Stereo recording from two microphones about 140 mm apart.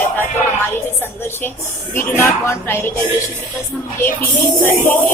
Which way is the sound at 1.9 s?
15° left (ahead or behind).